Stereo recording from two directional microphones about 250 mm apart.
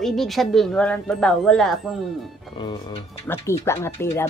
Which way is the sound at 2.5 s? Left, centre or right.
Centre.